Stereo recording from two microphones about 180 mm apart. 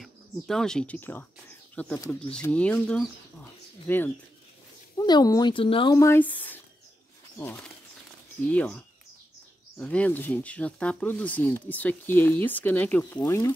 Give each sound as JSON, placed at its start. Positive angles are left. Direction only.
{"t": 0.0, "sound": "speech", "side_deg": 5}
{"t": 4.9, "sound": "a woman's voice", "side_deg": 20}
{"t": 5.9, "sound": "speech", "side_deg": 15}